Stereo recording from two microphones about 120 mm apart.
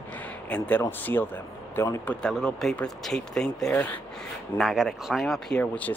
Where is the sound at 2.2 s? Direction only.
5° left (ahead or behind).